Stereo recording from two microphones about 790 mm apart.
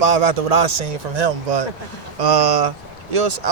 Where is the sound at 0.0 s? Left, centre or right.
Right.